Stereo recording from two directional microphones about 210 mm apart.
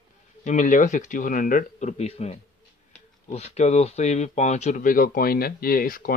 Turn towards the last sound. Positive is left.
turn(degrees=45)  # may be behind; listen again after turning